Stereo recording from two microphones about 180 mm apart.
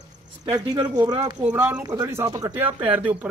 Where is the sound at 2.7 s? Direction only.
30° right (ahead or behind).